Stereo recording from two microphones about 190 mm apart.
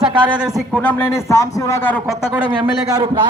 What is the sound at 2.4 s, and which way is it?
Speech, 20° right (ahead or behind).